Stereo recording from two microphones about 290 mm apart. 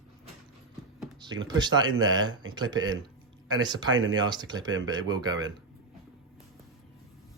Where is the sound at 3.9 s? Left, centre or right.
Right.